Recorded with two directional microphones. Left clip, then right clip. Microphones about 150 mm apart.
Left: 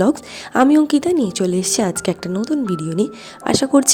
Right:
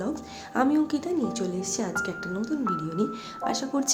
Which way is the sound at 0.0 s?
70° left (ahead or behind).